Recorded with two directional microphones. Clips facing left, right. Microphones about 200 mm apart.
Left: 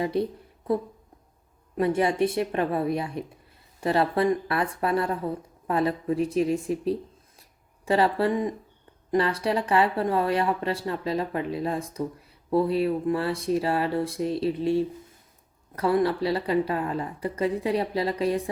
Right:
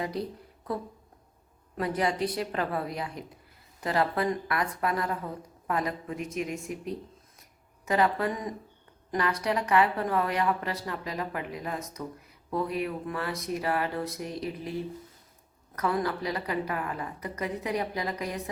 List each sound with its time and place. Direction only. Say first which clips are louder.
0.0 s speech: left 7 dB; 25° left (ahead or behind)
1.7 s speech: left 5 dB; 25° left (ahead or behind)